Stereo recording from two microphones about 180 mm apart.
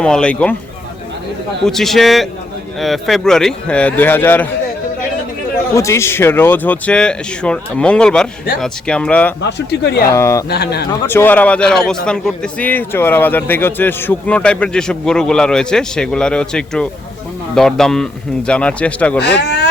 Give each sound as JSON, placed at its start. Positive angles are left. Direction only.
{"t": 0.0, "sound": "speech", "side_deg": 5}
{"t": 1.6, "sound": "a man's voice", "side_deg": 0}
{"t": 5.7, "sound": "speech", "side_deg": 15}
{"t": 9.4, "sound": "speech", "side_deg": 70}
{"t": 10.1, "sound": "speech", "side_deg": 15}
{"t": 10.5, "sound": "speech", "side_deg": 65}
{"t": 11.0, "sound": "a man's voice", "side_deg": 10}
{"t": 19.2, "sound": "speech", "side_deg": 65}